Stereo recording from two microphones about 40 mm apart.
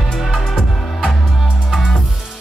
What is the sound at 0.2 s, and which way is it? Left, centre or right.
Music, centre.